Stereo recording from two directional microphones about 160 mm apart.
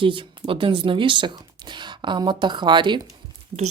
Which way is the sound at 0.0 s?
35° right (ahead or behind).